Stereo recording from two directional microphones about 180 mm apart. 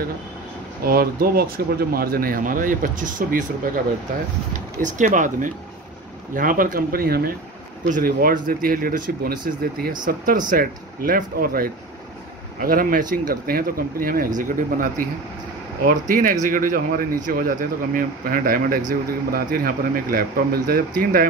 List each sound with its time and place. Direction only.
0.8 s speech: 55° right (ahead or behind)
4.8 s speech: 45° right (ahead or behind)